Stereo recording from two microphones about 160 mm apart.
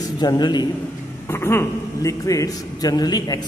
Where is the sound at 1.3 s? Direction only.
15° left (ahead or behind).